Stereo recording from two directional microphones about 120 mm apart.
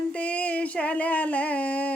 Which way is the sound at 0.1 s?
10° left (ahead or behind).